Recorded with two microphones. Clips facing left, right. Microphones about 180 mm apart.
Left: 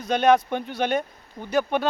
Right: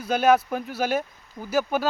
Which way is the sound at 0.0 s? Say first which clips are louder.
Left 1 dB; 5° right (ahead or behind).